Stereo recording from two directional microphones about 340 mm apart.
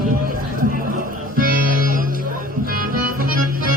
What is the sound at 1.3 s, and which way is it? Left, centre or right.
Music, right.